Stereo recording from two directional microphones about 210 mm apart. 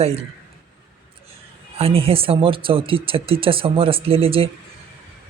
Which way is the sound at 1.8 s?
25° right (ahead or behind).